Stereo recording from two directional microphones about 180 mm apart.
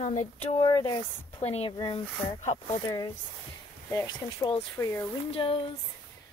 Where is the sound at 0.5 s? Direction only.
20° left (ahead or behind).